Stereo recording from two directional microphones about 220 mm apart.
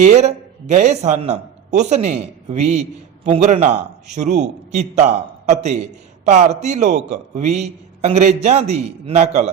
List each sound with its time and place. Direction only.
0.0 s a man's voice: 30° right (ahead or behind)